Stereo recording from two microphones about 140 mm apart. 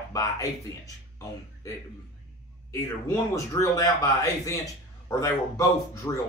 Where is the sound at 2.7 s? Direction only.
25° left (ahead or behind).